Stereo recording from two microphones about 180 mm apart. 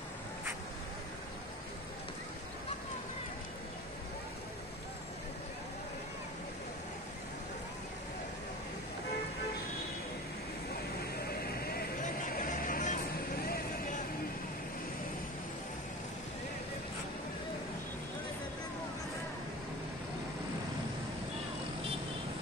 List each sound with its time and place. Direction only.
11.6 s vehicle: 55° left (ahead or behind)